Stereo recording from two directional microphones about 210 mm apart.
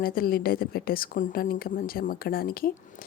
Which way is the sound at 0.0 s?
45° left (ahead or behind).